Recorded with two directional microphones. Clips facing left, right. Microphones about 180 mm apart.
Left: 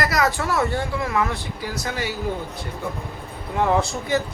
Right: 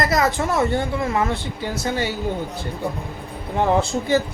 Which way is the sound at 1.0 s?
30° right (ahead or behind).